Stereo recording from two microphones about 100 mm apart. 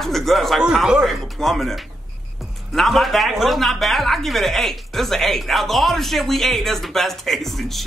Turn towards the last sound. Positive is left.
turn(degrees=0)  # may be behind; listen again after turning